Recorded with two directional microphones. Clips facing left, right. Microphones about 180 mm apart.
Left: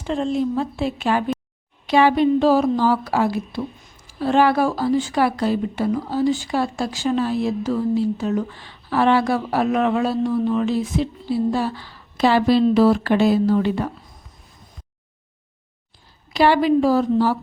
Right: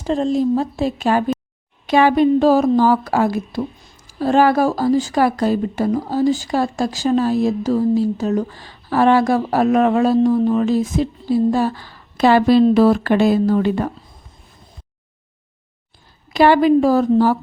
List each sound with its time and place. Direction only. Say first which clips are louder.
0.0 s a woman's voice: right 4 dB; 40° right (ahead or behind)
16.3 s a woman's voice: right 4 dB; 50° right (ahead or behind)